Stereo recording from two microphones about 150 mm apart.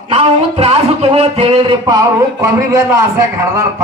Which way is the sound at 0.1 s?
45° right (ahead or behind).